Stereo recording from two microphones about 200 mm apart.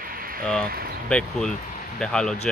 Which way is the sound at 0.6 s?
50° right (ahead or behind).